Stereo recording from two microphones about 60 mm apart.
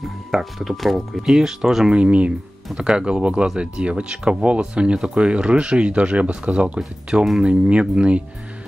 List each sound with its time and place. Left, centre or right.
0.0 s speech: centre
2.0 s speech: right
2.7 s speech: centre